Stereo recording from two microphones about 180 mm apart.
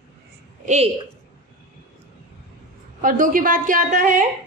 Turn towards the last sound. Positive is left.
turn(degrees=-45)  # may be behind; listen again after turning